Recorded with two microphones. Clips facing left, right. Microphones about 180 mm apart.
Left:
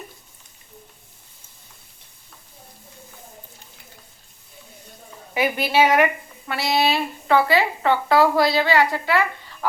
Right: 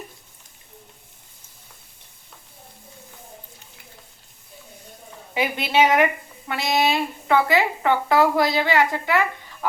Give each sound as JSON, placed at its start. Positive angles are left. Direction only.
{"t": 5.3, "sound": "a woman's voice", "side_deg": -25}